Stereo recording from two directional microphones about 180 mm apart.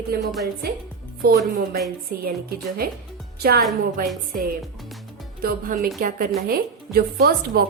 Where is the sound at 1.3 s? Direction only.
55° right (ahead or behind).